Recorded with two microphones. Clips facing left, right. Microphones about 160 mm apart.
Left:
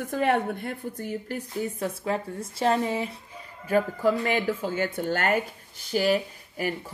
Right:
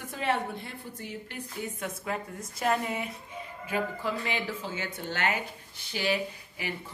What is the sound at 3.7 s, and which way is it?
A woman's voice, 45° left (ahead or behind).